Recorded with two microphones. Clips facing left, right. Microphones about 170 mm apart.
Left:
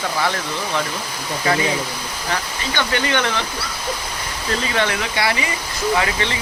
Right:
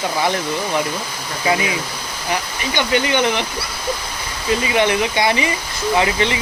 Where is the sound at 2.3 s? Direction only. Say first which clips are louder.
Right 3 dB; 15° right (ahead or behind).